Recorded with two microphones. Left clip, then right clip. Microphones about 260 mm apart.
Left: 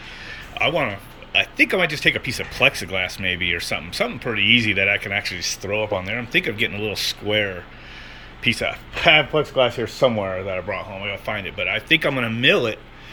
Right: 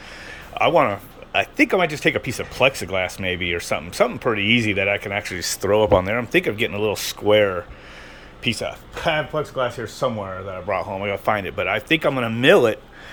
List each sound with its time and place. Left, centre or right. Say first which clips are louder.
0.5 s speech: right 4 dB; centre
10.7 s speech: right 4 dB; centre